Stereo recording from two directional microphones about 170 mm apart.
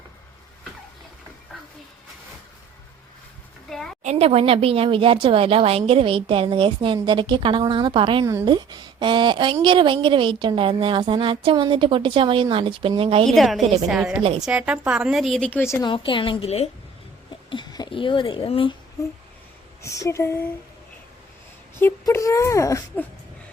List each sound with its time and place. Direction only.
3.7 s a sound: centre (ahead or behind)
4.0 s speech: 40° right (ahead or behind)
8.2 s speech: 20° right (ahead or behind)
13.2 s a woman's voice: centre (ahead or behind)
14.2 s speech: 35° right (ahead or behind)
14.4 s a woman's voice: 5° right (ahead or behind); by 15.9 s 15° left (ahead or behind)
15.9 s a woman's voice: 30° left (ahead or behind)
19.8 s speech: 15° left (ahead or behind)
21.8 s speech: 15° left (ahead or behind)